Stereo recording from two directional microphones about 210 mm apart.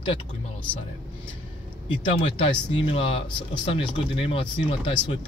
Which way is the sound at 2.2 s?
25° left (ahead or behind).